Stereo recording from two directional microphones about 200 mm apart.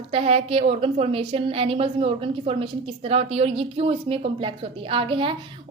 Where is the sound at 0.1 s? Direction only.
30° right (ahead or behind).